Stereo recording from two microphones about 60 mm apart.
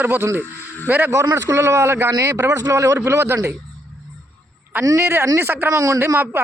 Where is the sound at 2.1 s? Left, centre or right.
Right.